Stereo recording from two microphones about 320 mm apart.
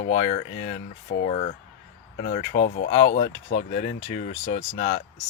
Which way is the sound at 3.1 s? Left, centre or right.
Left.